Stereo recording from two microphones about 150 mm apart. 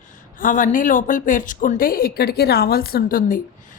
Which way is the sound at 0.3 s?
65° left (ahead or behind).